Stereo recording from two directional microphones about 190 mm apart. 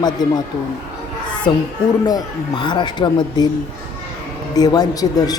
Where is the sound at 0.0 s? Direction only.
20° left (ahead or behind).